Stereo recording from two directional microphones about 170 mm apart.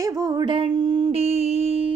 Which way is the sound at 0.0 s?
20° right (ahead or behind).